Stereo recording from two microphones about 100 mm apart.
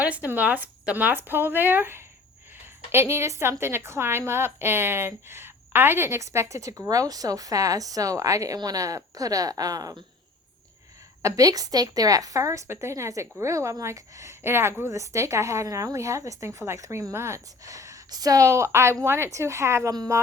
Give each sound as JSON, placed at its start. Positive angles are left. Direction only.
{"t": 0.0, "sound": "a woman's voice", "side_deg": -15}
{"t": 11.2, "sound": "a woman's voice", "side_deg": -35}
{"t": 19.9, "sound": "a woman's voice", "side_deg": -40}